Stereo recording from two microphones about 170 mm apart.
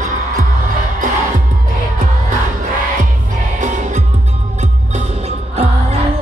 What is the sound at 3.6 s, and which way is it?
Music, 45° right (ahead or behind).